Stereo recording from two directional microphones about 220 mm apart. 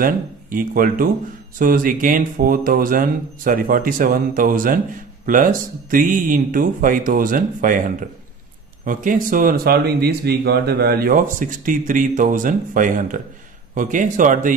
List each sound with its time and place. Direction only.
0.0 s speech: 40° right (ahead or behind)